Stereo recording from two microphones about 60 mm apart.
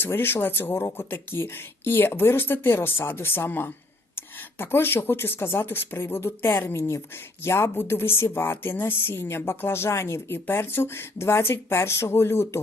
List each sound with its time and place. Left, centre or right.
0.0 s speech: left
6.7 s speech: left
7.4 s a woman's voice: left